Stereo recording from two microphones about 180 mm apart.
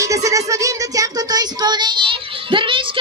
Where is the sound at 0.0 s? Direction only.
20° right (ahead or behind).